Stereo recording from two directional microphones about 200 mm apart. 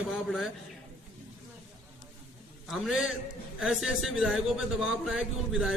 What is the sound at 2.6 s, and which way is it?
A man's voice, centre (ahead or behind).